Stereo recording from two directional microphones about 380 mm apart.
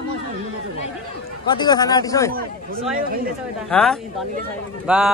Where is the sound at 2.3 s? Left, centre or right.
Right.